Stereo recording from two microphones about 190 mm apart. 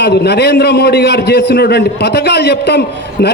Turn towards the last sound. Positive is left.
turn(degrees=60)  # may be behind; listen again after turning